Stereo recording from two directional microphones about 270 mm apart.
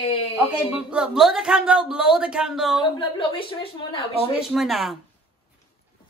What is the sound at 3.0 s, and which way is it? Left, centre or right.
A woman's voice, centre.